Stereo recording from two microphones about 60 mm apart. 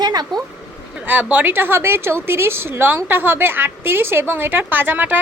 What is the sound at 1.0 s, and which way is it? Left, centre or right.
A woman's voice, right.